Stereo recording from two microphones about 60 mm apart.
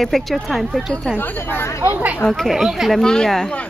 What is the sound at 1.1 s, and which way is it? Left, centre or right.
Speech, left.